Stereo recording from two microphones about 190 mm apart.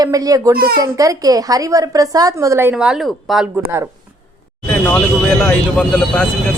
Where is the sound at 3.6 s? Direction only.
10° right (ahead or behind).